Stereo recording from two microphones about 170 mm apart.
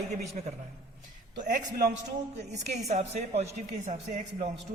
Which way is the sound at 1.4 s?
50° right (ahead or behind).